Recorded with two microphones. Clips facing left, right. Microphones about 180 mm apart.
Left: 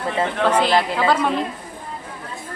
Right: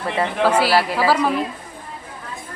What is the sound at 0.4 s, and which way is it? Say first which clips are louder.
Speech: right 1 dB; 5° right (ahead or behind).